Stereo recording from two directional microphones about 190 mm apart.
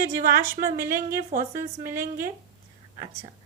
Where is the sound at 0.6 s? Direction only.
45° right (ahead or behind).